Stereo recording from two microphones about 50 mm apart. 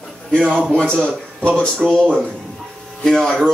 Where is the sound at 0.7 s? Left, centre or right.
Centre.